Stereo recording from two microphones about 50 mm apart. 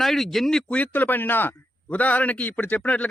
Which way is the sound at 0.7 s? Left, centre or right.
Left.